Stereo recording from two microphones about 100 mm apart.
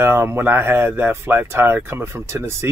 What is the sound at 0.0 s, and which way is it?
Speech, 25° right (ahead or behind).